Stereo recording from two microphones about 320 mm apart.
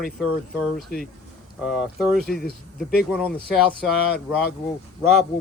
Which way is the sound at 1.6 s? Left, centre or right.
Centre.